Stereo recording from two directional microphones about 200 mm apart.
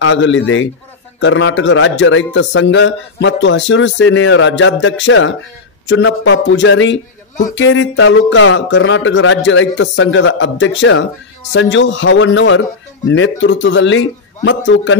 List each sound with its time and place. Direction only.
0.0 s a man's voice: 70° left (ahead or behind)